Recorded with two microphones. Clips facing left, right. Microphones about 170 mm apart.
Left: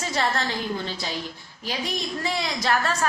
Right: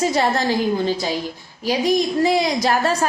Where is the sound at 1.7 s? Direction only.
15° right (ahead or behind).